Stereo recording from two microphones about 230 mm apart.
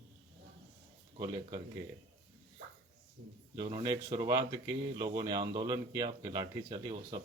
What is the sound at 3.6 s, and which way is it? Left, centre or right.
Speech, centre.